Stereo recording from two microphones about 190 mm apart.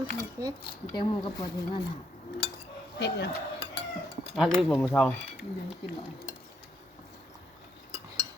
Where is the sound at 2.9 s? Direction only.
65° left (ahead or behind).